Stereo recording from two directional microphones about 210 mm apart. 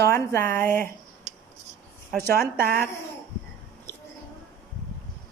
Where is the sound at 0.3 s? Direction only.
10° left (ahead or behind).